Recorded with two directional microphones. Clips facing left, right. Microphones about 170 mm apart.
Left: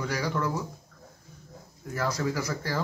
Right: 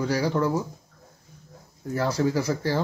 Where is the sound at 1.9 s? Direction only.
30° right (ahead or behind).